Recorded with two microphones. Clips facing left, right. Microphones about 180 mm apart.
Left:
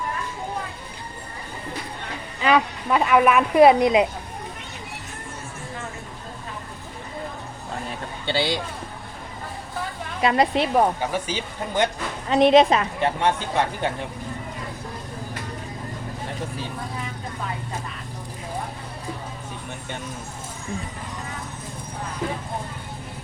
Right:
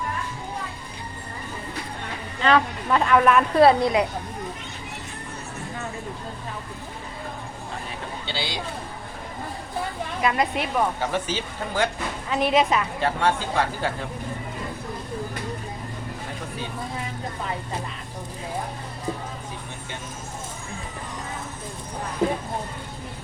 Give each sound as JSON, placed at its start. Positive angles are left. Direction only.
{"t": 2.4, "sound": "speech", "side_deg": 10}
{"t": 8.3, "sound": "speech", "side_deg": 50}
{"t": 10.2, "sound": "speech", "side_deg": 30}
{"t": 11.0, "sound": "speech", "side_deg": 15}
{"t": 12.3, "sound": "a woman's voice", "side_deg": 30}